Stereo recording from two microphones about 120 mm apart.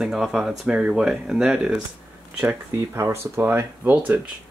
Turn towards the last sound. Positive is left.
turn(degrees=-15)  # may be behind; listen again after turning